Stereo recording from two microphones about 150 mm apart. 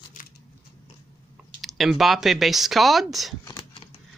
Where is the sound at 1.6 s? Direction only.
Centre (ahead or behind).